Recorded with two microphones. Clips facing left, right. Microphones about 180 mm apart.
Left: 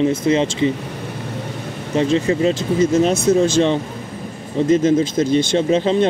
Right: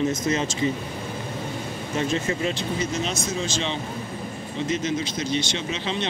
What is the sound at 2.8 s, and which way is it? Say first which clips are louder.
Speech: left 16 dB; 50° left (ahead or behind).